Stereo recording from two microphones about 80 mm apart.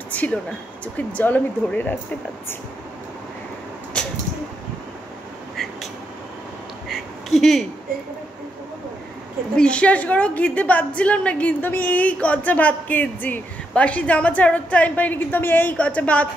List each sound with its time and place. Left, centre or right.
0.1 s speech: centre
6.9 s a sound: centre
9.6 s a woman's voice: centre